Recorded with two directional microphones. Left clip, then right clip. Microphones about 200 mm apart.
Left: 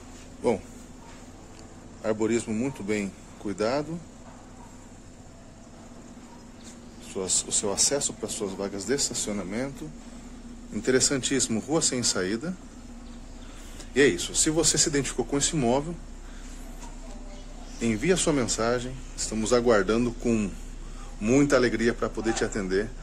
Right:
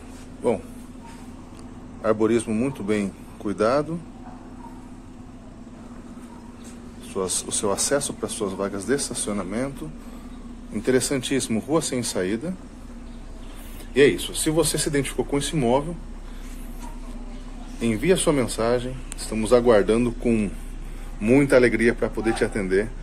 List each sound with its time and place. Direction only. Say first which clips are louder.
2.0 s speech: right 6 dB; 15° left (ahead or behind)
7.2 s speech: right 2 dB; 10° left (ahead or behind)
10.7 s speech: right 2 dB; 25° left (ahead or behind)
13.9 s speech: right 4 dB; 25° left (ahead or behind)
17.7 s speech: right 4 dB; 20° left (ahead or behind)